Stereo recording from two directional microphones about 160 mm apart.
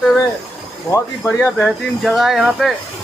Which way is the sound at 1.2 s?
5° left (ahead or behind).